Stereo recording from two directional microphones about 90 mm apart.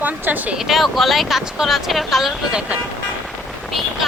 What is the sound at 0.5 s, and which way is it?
Speech, 5° right (ahead or behind).